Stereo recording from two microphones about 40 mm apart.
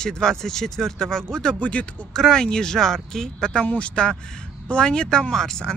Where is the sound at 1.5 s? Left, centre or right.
Left.